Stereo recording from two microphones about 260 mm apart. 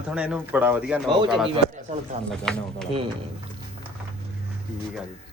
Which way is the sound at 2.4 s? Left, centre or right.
Centre.